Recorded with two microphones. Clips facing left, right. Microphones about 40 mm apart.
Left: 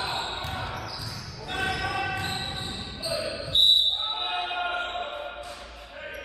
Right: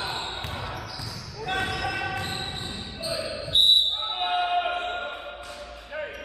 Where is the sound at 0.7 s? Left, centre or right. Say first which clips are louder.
Even; centre.